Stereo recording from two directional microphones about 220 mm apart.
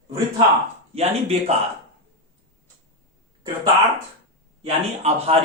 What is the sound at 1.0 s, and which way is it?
Speech, 30° right (ahead or behind).